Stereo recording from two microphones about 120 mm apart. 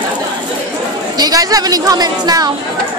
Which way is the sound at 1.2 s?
35° right (ahead or behind).